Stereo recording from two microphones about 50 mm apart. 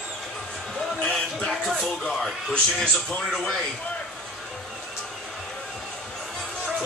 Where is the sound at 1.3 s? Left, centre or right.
Centre.